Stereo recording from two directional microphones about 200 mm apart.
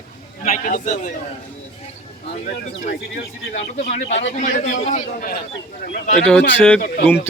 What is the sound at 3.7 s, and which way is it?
A man's voice, 35° left (ahead or behind).